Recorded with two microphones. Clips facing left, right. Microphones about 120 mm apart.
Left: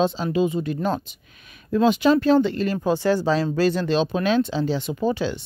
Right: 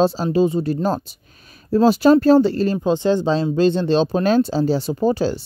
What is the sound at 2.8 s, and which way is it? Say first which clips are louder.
Speech: right 1 dB; 20° right (ahead or behind).